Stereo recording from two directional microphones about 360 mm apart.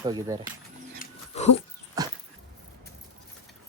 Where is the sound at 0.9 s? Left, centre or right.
Left.